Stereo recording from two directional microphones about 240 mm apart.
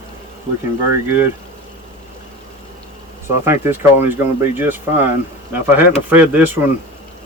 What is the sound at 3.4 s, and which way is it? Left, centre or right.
Speech, centre.